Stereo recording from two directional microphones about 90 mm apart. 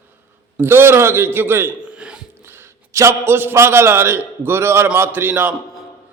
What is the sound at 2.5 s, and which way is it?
A man's voice, 30° right (ahead or behind).